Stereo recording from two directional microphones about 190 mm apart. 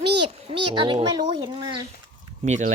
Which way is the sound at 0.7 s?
25° right (ahead or behind).